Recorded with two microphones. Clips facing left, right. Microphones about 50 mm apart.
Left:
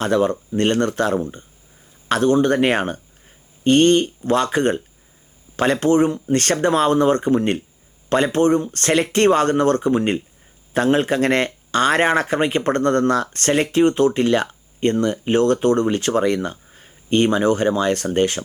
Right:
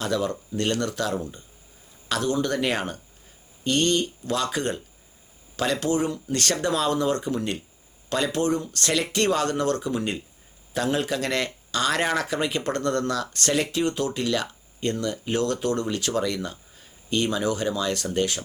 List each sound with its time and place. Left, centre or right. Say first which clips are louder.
0.0 s speech: left 8 dB; left